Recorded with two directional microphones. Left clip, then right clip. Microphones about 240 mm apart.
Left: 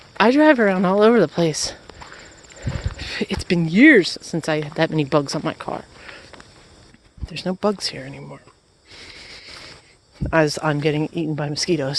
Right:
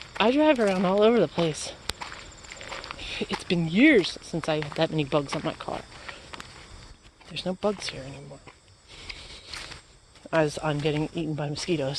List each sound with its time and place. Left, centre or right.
0.2 s speech: left
3.0 s a sound: left
3.4 s speech: left
7.3 s speech: left
10.2 s speech: left